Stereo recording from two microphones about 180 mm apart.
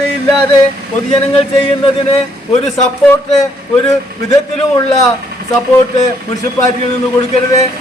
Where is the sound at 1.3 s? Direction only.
30° left (ahead or behind).